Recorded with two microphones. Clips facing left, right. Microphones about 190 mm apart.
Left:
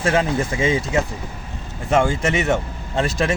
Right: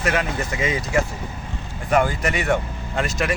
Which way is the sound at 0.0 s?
25° left (ahead or behind).